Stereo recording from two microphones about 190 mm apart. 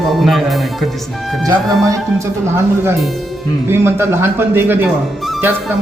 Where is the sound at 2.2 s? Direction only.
10° right (ahead or behind).